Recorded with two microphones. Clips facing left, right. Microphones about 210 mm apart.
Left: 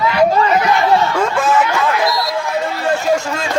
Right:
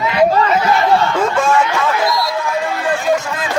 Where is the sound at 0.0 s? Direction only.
20° right (ahead or behind).